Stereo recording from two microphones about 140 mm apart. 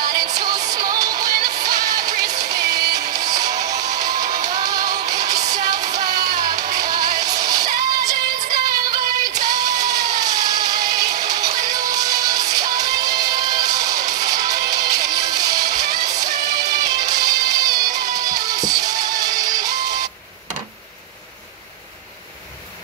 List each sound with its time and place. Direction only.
0.1 s music: 30° right (ahead or behind)